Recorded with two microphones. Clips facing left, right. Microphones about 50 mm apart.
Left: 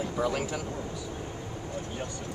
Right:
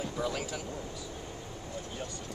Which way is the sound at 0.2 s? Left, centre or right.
Left.